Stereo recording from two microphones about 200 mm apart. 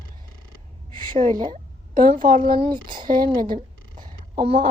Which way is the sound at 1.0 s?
40° right (ahead or behind).